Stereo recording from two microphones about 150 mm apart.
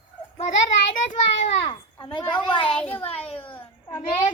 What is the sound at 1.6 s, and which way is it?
A child's voice, 35° left (ahead or behind).